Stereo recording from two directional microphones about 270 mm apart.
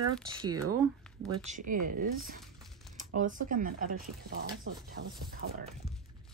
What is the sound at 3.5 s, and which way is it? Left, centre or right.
Speech, right.